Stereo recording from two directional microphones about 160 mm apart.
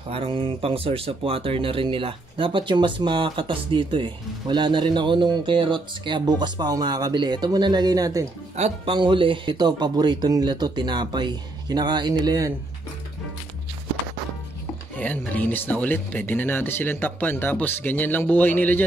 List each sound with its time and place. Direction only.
0.1 s speech: 35° right (ahead or behind)
8.5 s speech: 45° right (ahead or behind)
8.9 s speech: 30° right (ahead or behind)
15.0 s speech: 10° left (ahead or behind)